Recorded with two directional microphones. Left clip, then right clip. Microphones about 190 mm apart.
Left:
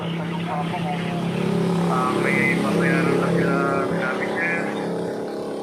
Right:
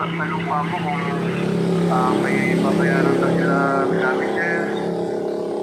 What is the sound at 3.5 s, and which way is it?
Music, 30° right (ahead or behind).